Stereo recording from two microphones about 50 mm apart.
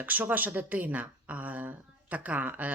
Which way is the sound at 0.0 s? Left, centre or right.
Right.